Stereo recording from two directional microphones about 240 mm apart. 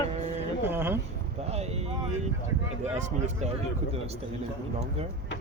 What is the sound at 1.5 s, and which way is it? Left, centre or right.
Speech, right.